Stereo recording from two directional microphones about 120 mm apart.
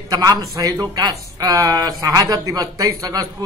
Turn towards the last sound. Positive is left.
turn(degrees=-30)  # may be behind; listen again after turning